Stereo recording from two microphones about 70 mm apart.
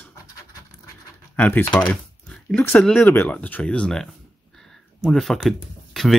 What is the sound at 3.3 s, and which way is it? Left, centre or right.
Speech, left.